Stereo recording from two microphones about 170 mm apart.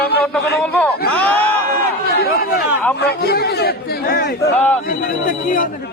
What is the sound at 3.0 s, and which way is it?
Speech, 70° left (ahead or behind).